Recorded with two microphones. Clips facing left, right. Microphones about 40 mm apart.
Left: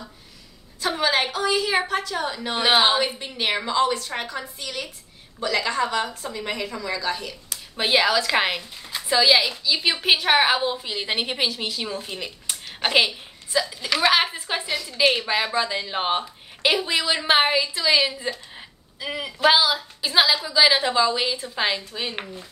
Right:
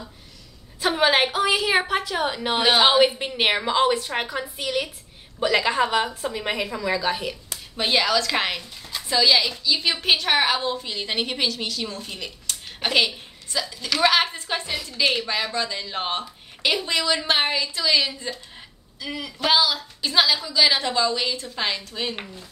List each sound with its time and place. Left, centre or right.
0.7 s a woman's voice: right
7.7 s a woman's voice: centre
19.4 s a woman's voice: centre